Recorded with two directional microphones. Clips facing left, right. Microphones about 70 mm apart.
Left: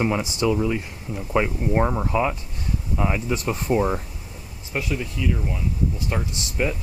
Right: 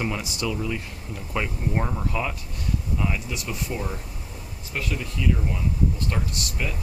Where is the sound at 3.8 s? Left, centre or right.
Left.